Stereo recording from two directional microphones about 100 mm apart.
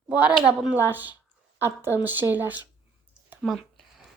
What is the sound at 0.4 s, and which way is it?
A woman's voice, 10° right (ahead or behind).